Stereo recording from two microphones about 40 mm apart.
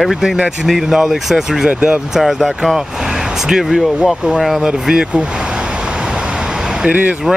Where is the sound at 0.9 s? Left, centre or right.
Centre.